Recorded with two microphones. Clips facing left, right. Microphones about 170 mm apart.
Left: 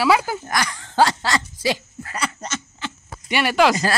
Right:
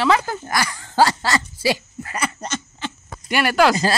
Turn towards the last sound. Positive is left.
turn(degrees=0)  # may be behind; listen again after turning